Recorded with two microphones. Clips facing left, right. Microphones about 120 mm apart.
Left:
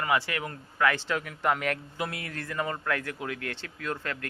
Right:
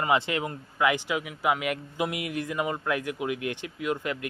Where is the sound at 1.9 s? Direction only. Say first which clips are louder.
Right 5 dB; 15° right (ahead or behind).